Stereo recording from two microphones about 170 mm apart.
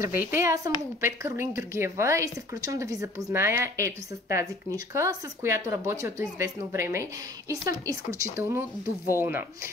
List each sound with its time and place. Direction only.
0.0 s speech: 15° right (ahead or behind)